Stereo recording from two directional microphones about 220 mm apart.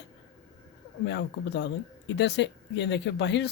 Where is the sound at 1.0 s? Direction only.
55° left (ahead or behind).